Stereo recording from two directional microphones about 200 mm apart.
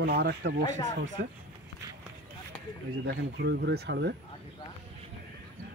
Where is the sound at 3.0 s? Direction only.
60° right (ahead or behind).